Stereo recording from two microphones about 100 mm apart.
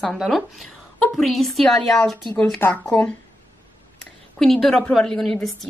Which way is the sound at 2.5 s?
20° left (ahead or behind).